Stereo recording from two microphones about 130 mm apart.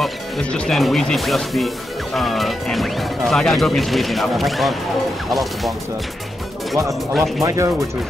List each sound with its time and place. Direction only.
0.0 s speech: 10° left (ahead or behind)
6.9 s speech: centre (ahead or behind)
7.4 s speech: 25° right (ahead or behind)